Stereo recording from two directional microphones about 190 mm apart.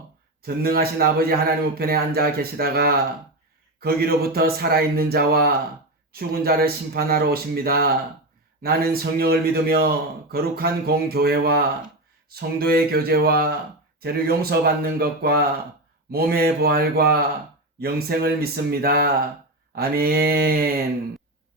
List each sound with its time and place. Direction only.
0.4 s a man's voice: 55° right (ahead or behind)